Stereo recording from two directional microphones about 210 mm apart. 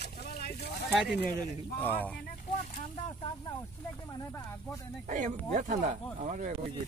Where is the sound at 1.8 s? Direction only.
5° left (ahead or behind).